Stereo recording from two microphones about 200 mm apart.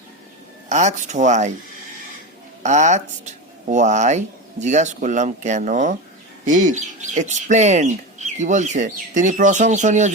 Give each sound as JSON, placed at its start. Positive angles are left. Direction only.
{"t": 0.7, "sound": "speech", "side_deg": -35}
{"t": 2.6, "sound": "speech", "side_deg": -35}